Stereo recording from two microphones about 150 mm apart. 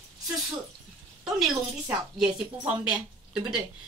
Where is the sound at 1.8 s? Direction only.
5° right (ahead or behind).